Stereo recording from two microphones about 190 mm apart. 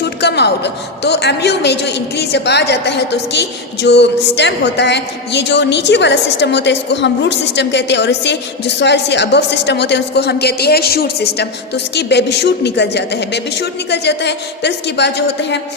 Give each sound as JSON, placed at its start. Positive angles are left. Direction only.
{"t": 0.0, "sound": "a woman's voice", "side_deg": 60}